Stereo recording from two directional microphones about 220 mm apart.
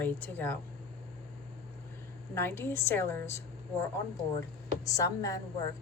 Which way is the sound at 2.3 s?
10° left (ahead or behind).